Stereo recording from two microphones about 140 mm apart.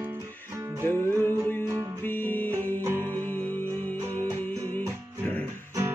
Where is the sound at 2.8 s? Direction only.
15° right (ahead or behind).